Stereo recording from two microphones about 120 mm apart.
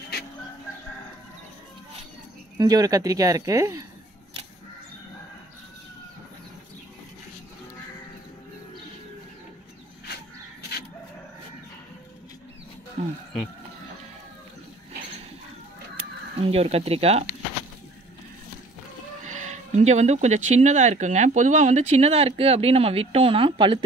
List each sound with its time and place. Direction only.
2.5 s speech: 30° right (ahead or behind)
13.0 s a sound: 65° right (ahead or behind)
16.3 s speech: 55° right (ahead or behind)
19.2 s speech: 90° right; by 23.8 s 45° right (ahead or behind)